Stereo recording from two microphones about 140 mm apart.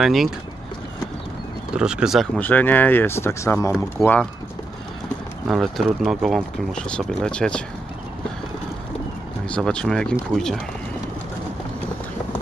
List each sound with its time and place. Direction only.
0.0 s speech: centre (ahead or behind)
1.8 s speech: 5° right (ahead or behind)
2.3 s speech: 10° left (ahead or behind)
5.5 s speech: centre (ahead or behind)
9.5 s speech: 5° left (ahead or behind)